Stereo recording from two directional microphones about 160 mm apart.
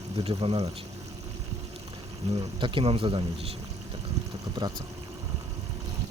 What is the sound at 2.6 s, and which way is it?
Speech, 30° right (ahead or behind).